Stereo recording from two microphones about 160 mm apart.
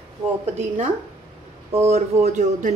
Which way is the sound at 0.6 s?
45° right (ahead or behind).